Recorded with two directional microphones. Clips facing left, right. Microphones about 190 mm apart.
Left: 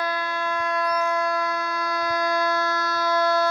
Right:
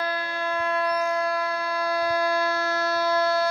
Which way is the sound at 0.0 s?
30° right (ahead or behind).